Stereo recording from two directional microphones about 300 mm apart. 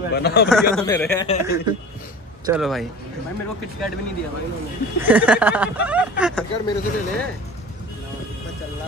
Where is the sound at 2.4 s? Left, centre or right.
Centre.